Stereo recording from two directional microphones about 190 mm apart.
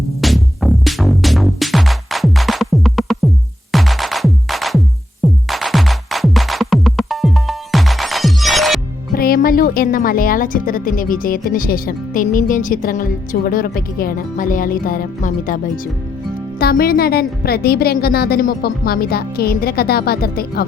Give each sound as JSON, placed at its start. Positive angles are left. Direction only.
{"t": 0.2, "sound": "music", "side_deg": 0}
{"t": 9.1, "sound": "speech", "side_deg": 50}